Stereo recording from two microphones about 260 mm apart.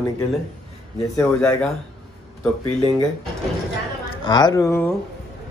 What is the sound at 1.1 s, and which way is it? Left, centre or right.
Speech, centre.